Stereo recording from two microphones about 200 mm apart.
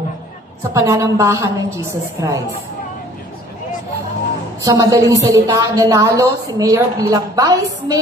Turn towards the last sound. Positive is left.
turn(degrees=-20)  # may be behind; listen again after turning